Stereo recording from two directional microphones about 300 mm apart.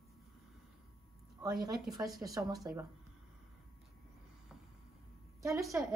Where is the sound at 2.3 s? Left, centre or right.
Centre.